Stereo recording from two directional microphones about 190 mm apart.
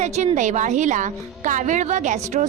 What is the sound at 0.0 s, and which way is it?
A woman's voice, 35° right (ahead or behind).